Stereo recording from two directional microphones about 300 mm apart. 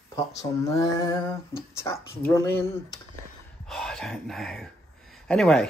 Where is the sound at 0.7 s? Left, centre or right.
Centre.